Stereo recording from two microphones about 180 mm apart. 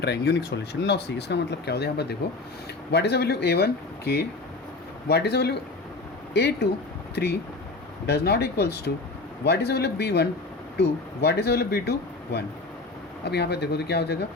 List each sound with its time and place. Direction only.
0.0 s speech: 70° left (ahead or behind)